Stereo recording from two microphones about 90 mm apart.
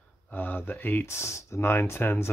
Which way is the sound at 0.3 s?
20° left (ahead or behind).